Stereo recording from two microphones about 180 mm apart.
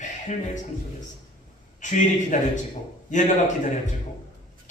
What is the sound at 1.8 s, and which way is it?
A man's voice, 45° left (ahead or behind).